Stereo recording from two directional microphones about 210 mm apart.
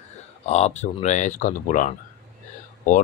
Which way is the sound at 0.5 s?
30° left (ahead or behind).